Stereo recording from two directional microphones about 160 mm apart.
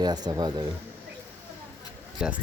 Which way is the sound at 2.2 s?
5° right (ahead or behind).